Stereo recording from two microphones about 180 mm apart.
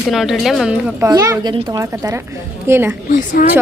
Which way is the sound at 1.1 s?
20° right (ahead or behind).